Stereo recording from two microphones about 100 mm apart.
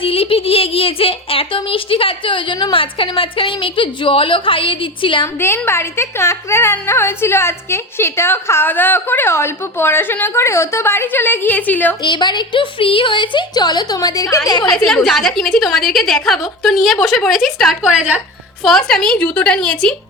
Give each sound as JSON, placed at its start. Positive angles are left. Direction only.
{"t": 0.0, "sound": "a woman's voice", "side_deg": 70}
{"t": 5.2, "sound": "speech", "side_deg": 25}
{"t": 12.0, "sound": "a woman's voice", "side_deg": 50}
{"t": 14.8, "sound": "a woman's voice", "side_deg": 0}
{"t": 17.9, "sound": "a woman's voice", "side_deg": -15}
{"t": 18.6, "sound": "a woman's voice", "side_deg": 5}